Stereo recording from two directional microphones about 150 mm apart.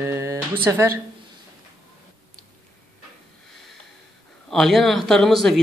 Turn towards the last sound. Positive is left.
turn(degrees=0)  # may be behind; listen again after turning